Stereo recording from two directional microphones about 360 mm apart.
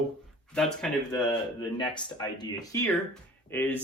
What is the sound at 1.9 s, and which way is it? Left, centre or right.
Speech, centre.